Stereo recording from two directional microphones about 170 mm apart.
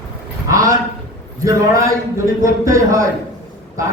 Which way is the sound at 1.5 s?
20° right (ahead or behind).